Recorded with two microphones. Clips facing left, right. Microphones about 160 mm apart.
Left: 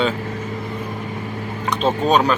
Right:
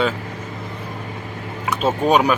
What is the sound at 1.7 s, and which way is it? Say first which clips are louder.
Speech: even; 10° right (ahead or behind).